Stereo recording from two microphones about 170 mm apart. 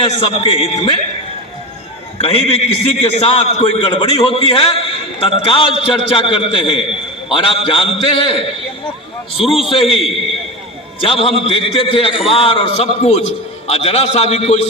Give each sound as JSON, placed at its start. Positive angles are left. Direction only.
{"t": 0.0, "sound": "a man's voice", "side_deg": 30}
{"t": 2.1, "sound": "a man's voice", "side_deg": 35}
{"t": 11.0, "sound": "a man's voice", "side_deg": 35}